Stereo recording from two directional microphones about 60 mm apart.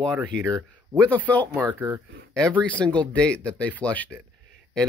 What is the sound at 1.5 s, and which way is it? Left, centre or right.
Speech, right.